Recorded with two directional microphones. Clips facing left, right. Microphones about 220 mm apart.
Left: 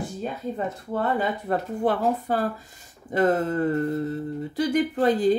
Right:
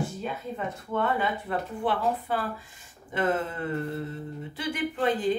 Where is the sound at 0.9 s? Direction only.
40° left (ahead or behind).